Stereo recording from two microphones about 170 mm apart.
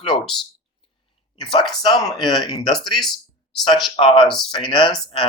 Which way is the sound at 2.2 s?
Centre (ahead or behind).